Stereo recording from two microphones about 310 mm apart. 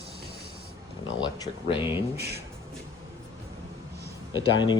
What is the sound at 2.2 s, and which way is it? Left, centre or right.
Speech, right.